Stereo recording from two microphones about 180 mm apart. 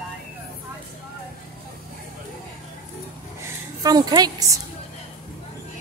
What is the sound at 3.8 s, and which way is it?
Speech, 20° right (ahead or behind).